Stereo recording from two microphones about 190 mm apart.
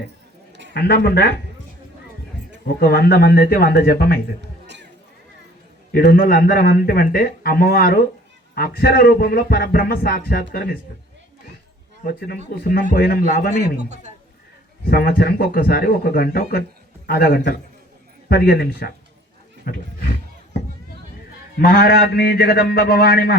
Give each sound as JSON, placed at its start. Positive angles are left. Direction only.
{"t": 0.7, "sound": "a man's voice", "side_deg": 55}
{"t": 2.6, "sound": "speech", "side_deg": 50}
{"t": 4.4, "sound": "a sound", "side_deg": -65}
{"t": 5.9, "sound": "speech", "side_deg": 50}
{"t": 12.0, "sound": "speech", "side_deg": 55}
{"t": 13.5, "sound": "a man's voice", "side_deg": -35}
{"t": 14.8, "sound": "a man's voice", "side_deg": 50}
{"t": 21.6, "sound": "speech", "side_deg": 55}